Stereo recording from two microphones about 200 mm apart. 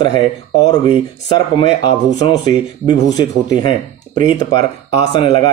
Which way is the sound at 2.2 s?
20° left (ahead or behind).